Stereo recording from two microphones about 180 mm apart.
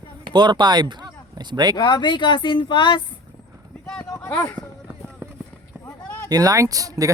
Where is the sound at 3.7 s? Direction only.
10° left (ahead or behind).